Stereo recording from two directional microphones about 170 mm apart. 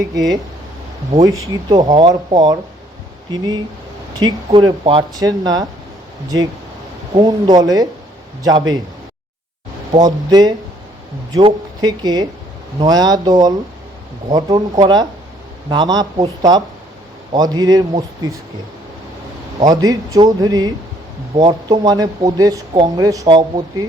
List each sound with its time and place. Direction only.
0.0 s speech: 20° right (ahead or behind)
9.9 s speech: 25° right (ahead or behind)
19.6 s speech: 20° right (ahead or behind)